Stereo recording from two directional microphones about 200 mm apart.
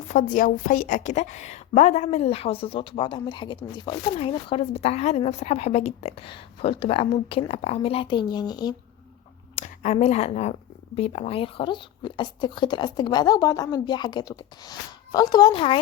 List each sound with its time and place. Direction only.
0.1 s a woman's voice: 40° left (ahead or behind); by 8.7 s 20° left (ahead or behind)
9.6 s a woman's voice: 35° left (ahead or behind)